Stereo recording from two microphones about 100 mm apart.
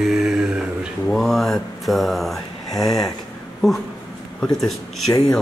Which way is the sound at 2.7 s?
40° left (ahead or behind).